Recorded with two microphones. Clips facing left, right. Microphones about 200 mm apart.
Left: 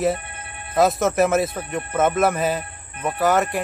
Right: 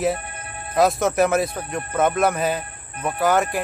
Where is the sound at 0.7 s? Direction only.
Centre (ahead or behind).